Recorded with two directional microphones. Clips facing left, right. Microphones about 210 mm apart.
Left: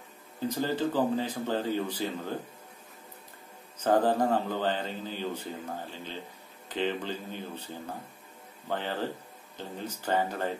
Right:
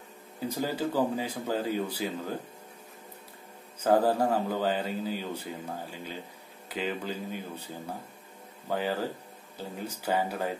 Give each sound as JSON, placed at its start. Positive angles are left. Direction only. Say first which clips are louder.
{"t": 0.5, "sound": "speech", "louder": "left 1 dB", "side_deg": -10}
{"t": 3.8, "sound": "speech", "louder": "right 1 dB", "side_deg": -10}